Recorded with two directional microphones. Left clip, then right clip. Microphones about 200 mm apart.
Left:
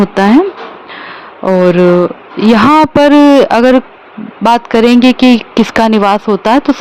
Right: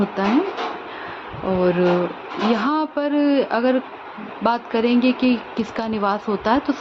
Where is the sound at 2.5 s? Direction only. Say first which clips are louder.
Left 16 dB; 60° left (ahead or behind).